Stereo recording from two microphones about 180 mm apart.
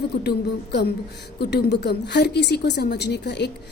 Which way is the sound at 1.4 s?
65° left (ahead or behind).